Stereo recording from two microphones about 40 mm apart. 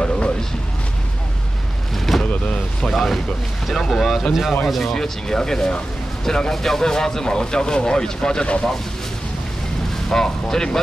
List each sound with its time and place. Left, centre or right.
2.0 s vehicle: centre
2.4 s a sound: left
2.9 s speech: centre
4.3 s speech: centre
4.9 s speech: centre
10.0 s speech: centre